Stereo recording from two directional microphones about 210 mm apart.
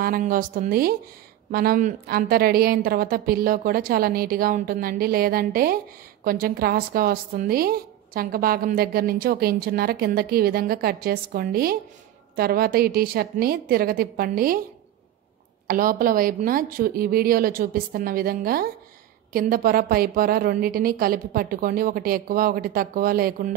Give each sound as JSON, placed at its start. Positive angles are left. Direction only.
{"t": 0.0, "sound": "a woman's voice", "side_deg": -45}
{"t": 15.6, "sound": "a woman's voice", "side_deg": -40}